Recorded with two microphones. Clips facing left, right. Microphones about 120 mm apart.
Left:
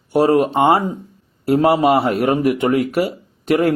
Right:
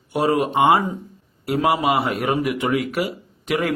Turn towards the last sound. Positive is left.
turn(degrees=45)  # may be behind; listen again after turning